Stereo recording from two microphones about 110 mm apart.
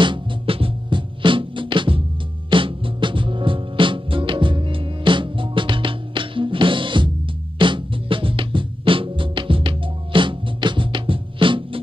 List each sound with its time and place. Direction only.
0.0 s music: 50° right (ahead or behind)